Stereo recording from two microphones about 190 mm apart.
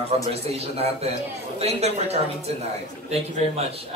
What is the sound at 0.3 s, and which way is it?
A man's voice, 35° right (ahead or behind).